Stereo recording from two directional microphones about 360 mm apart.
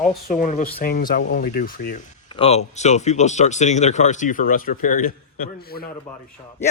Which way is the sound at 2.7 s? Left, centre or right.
Centre.